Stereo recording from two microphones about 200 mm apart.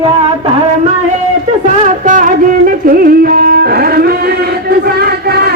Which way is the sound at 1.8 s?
40° right (ahead or behind).